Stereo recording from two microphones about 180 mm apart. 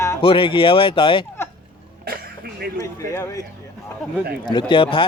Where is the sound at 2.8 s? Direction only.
15° left (ahead or behind).